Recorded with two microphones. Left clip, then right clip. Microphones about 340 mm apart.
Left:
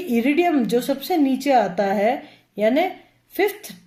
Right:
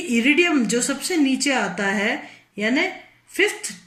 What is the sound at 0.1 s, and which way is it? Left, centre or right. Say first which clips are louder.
Speech: right 1 dB; centre.